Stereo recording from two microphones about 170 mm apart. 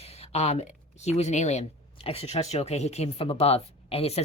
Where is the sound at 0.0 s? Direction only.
35° left (ahead or behind).